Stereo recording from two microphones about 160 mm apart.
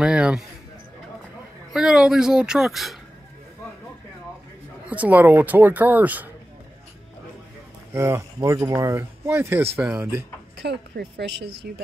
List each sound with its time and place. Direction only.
0.0 s a sound: 5° right (ahead or behind)
1.7 s speech: 5° right (ahead or behind)
4.8 s speech: 10° right (ahead or behind)
7.9 s speech: 15° right (ahead or behind)
10.6 s a woman's voice: 90° right